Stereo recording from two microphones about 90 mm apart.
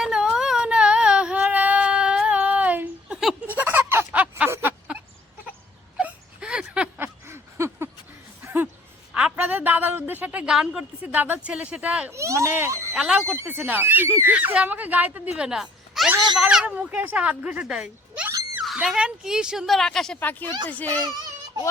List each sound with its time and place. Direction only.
0.0 s a sound: 5° right (ahead or behind)
6.0 s a sound: 10° right (ahead or behind)
7.0 s a sound: 30° right (ahead or behind)
9.1 s a woman's voice: 15° right (ahead or behind)
12.1 s speech: 35° right (ahead or behind)
12.9 s speech: 5° right (ahead or behind)
13.2 s speech: 25° right (ahead or behind)
14.3 s speech: 15° right (ahead or behind)
15.4 s a sound: 5° right (ahead or behind)
16.4 s speech: 10° right (ahead or behind)
19.6 s a woman's voice: 5° left (ahead or behind)
20.1 s a child's voice: 20° left (ahead or behind)